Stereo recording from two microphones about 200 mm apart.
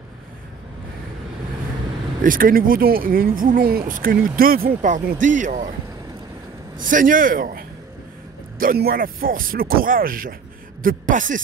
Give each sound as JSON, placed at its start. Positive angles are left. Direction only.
{"t": 2.2, "sound": "speech", "side_deg": -45}
{"t": 6.8, "sound": "speech", "side_deg": -40}